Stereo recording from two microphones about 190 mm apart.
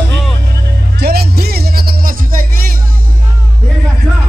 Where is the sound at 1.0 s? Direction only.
55° right (ahead or behind).